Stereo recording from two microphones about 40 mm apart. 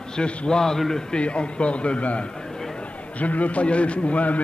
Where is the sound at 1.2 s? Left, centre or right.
Left.